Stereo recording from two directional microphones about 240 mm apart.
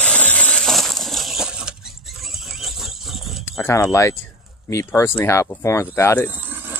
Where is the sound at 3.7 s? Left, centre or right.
Centre.